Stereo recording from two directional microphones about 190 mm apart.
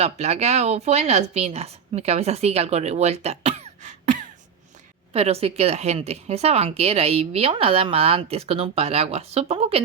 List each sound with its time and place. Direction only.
0.0 s a woman's voice: 35° right (ahead or behind)